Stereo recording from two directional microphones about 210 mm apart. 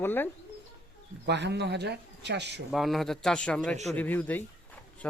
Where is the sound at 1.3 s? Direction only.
55° right (ahead or behind).